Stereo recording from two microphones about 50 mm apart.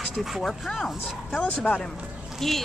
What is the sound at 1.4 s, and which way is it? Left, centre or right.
Speech, left.